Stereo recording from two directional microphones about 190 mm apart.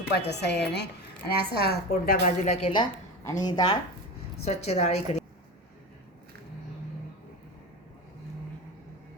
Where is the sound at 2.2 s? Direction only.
35° left (ahead or behind).